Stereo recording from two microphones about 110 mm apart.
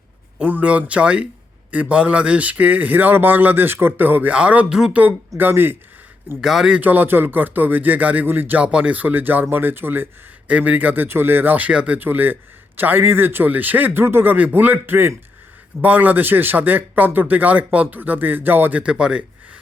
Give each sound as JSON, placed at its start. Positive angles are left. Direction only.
{"t": 0.3, "sound": "speech", "side_deg": -10}
{"t": 6.4, "sound": "speech", "side_deg": -5}